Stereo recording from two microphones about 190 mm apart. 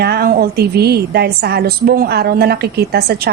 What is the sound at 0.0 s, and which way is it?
A woman's voice, 55° right (ahead or behind).